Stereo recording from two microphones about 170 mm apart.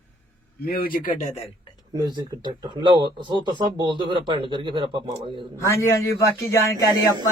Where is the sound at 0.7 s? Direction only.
60° left (ahead or behind).